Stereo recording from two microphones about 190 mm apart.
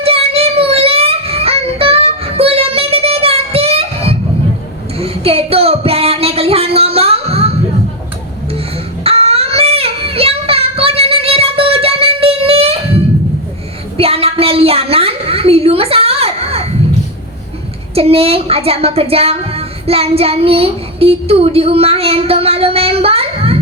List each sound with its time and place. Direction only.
0.0 s music: 30° right (ahead or behind)
4.9 s child singing: 30° right (ahead or behind)
9.0 s child singing: 30° right (ahead or behind)
13.9 s a sound: 30° right (ahead or behind)
17.9 s speech: 30° right (ahead or behind)